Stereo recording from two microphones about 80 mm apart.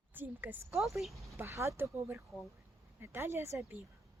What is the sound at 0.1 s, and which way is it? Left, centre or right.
Speech, right.